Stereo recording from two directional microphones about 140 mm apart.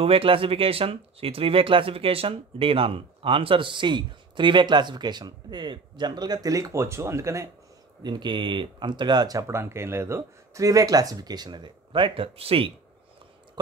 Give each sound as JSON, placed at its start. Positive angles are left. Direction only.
{"t": 0.0, "sound": "speech", "side_deg": -40}
{"t": 8.0, "sound": "speech", "side_deg": -35}